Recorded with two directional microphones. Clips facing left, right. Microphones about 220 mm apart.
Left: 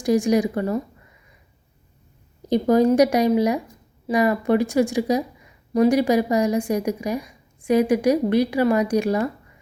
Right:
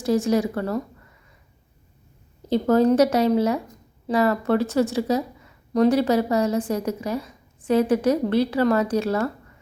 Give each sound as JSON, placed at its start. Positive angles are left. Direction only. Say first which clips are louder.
{"t": 0.0, "sound": "a woman's voice", "louder": "left 2 dB", "side_deg": 15}
{"t": 2.5, "sound": "a woman's voice", "louder": "left 1 dB", "side_deg": 15}